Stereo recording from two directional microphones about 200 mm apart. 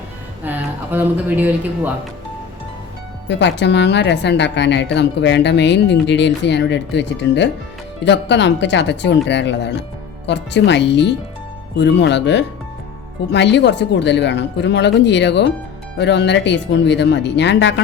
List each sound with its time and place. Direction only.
0.4 s speech: 10° right (ahead or behind)
3.2 s speech: 60° left (ahead or behind)